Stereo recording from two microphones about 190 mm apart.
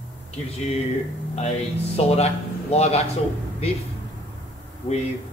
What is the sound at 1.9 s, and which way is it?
Speech, 35° left (ahead or behind).